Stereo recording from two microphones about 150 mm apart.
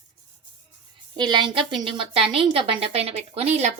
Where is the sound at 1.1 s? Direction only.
30° right (ahead or behind); by 3.7 s 45° right (ahead or behind).